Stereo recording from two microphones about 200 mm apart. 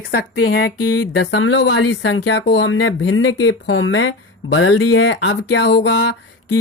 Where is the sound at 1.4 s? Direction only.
70° left (ahead or behind).